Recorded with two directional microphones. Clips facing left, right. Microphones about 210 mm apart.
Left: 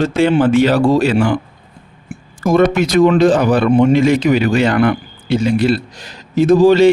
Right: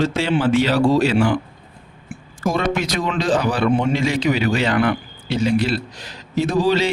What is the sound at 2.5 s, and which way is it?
Speech, 55° left (ahead or behind).